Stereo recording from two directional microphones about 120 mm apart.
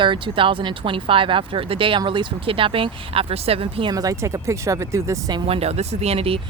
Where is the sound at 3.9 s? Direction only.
30° right (ahead or behind).